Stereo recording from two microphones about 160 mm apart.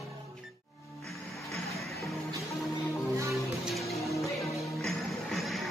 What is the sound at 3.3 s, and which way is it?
Music, centre (ahead or behind).